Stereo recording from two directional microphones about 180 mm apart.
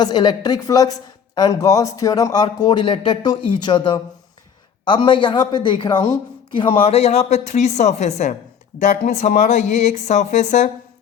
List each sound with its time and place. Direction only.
0.0 s a man's voice: 25° left (ahead or behind); by 10.7 s 40° left (ahead or behind)